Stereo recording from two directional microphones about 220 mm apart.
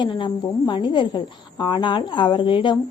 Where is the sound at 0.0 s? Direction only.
20° left (ahead or behind).